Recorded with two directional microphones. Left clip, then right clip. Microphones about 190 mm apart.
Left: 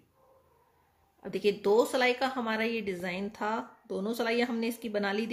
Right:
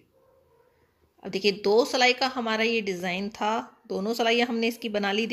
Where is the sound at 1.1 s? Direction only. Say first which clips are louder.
Right 4 dB; 20° right (ahead or behind).